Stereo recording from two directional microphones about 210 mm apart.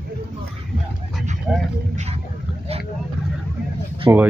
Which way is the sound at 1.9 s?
30° right (ahead or behind).